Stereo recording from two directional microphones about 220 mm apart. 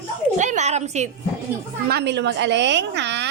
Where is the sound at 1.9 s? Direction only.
50° right (ahead or behind).